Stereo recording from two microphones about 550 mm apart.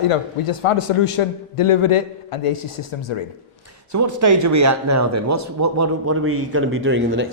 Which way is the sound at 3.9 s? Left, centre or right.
Right.